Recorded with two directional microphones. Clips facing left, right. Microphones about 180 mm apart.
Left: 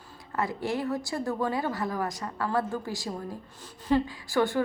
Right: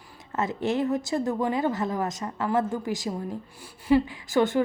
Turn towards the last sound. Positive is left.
turn(degrees=-20)  # may be behind; listen again after turning